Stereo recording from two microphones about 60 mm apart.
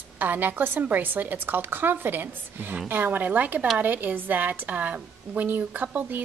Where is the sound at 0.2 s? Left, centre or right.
Right.